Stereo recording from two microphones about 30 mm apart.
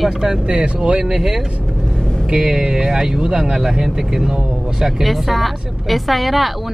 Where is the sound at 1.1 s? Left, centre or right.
Centre.